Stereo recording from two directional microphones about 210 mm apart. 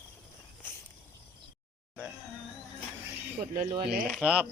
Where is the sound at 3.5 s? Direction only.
40° right (ahead or behind).